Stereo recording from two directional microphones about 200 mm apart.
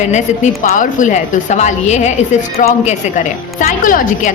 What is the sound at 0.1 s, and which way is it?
A woman's voice, 35° left (ahead or behind).